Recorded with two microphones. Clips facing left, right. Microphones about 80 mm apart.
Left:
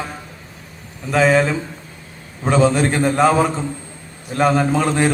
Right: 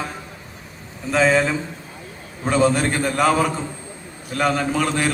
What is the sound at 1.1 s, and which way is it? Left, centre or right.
A man's voice, left.